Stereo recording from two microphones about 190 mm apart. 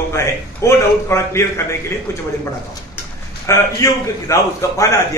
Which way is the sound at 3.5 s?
15° left (ahead or behind).